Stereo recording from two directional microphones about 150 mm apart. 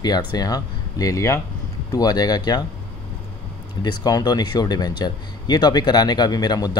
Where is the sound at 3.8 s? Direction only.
25° left (ahead or behind).